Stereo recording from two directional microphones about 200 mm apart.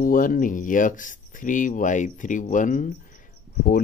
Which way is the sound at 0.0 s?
45° left (ahead or behind).